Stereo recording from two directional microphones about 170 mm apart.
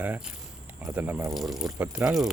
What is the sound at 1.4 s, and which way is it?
Speech, centre (ahead or behind).